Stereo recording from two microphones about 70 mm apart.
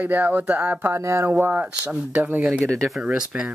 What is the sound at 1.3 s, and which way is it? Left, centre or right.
Speech, right.